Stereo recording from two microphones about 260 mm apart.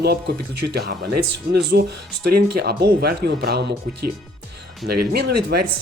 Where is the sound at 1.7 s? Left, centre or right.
Right.